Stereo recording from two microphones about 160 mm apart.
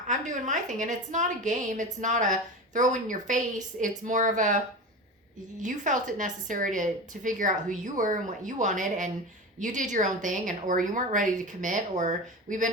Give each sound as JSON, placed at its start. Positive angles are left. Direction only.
{"t": 0.1, "sound": "a woman's voice", "side_deg": -50}